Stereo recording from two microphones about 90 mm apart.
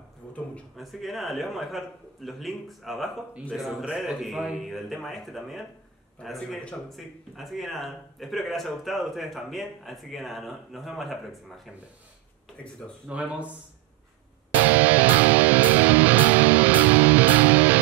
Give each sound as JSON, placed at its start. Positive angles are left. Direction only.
{"t": 0.7, "sound": "speech", "side_deg": 0}
{"t": 13.1, "sound": "speech", "side_deg": -15}
{"t": 14.5, "sound": "music", "side_deg": -20}